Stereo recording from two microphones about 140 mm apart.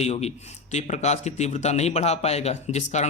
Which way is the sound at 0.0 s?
50° left (ahead or behind).